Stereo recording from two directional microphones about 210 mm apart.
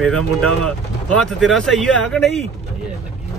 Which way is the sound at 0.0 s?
5° left (ahead or behind).